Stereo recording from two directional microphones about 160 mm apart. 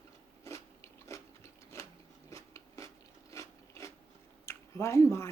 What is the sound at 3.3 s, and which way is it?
Filing, 20° left (ahead or behind).